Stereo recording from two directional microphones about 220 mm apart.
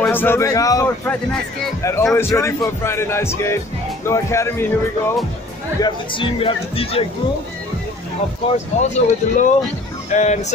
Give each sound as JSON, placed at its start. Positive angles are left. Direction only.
{"t": 0.0, "sound": "a man's voice", "side_deg": 10}
{"t": 5.8, "sound": "speech", "side_deg": 20}
{"t": 8.8, "sound": "speech", "side_deg": 35}